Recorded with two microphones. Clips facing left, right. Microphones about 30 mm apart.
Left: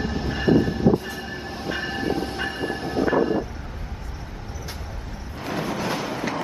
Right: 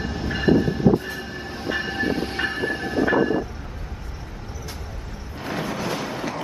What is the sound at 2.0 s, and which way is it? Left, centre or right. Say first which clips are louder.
Train: right 2 dB; centre.